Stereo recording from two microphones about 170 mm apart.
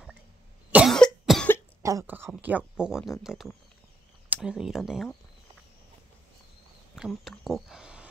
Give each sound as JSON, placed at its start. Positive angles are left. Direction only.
{"t": 0.7, "sound": "cough", "side_deg": -5}
{"t": 1.8, "sound": "speech", "side_deg": -20}
{"t": 7.0, "sound": "speech", "side_deg": 0}